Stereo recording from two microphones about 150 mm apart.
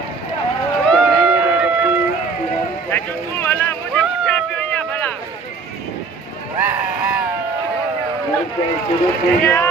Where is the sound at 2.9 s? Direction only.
15° left (ahead or behind).